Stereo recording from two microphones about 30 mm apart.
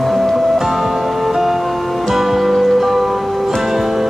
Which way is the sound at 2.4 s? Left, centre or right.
Centre.